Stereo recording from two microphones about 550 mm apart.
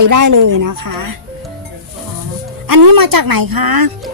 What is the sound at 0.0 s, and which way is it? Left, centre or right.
Speech, right.